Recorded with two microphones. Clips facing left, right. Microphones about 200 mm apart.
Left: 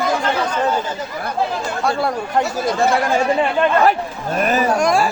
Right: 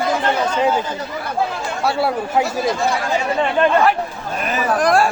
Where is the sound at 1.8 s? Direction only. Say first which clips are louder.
Right 2 dB; 5° right (ahead or behind).